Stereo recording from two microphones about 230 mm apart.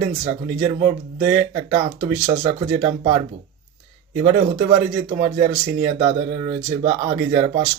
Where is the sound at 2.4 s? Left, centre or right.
Centre.